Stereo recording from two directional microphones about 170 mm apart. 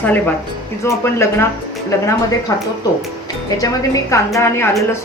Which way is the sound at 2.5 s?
20° left (ahead or behind).